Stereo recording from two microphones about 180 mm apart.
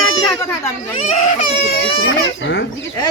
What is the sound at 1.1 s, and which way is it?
Speech, 40° left (ahead or behind).